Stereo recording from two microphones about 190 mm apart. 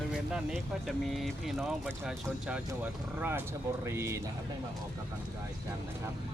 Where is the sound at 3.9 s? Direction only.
15° right (ahead or behind).